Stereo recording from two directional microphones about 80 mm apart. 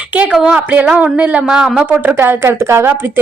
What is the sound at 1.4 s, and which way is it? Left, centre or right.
Speech, centre.